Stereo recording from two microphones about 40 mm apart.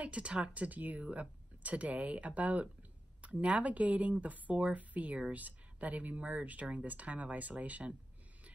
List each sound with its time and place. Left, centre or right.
0.0 s speech: right